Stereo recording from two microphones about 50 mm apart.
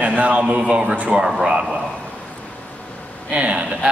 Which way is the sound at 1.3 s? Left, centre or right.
Centre.